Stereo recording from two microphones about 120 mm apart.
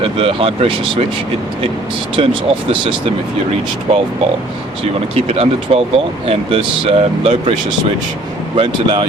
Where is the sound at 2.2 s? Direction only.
55° right (ahead or behind).